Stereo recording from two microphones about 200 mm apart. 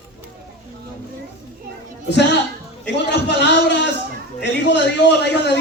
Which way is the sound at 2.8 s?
60° left (ahead or behind).